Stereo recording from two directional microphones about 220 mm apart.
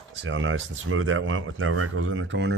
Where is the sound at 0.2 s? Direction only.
60° right (ahead or behind).